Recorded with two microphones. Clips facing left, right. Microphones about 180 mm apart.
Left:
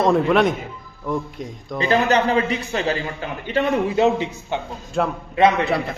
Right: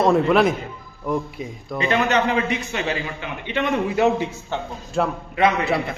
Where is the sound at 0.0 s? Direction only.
Centre (ahead or behind).